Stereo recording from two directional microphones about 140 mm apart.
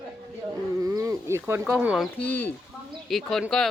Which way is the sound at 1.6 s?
5° right (ahead or behind).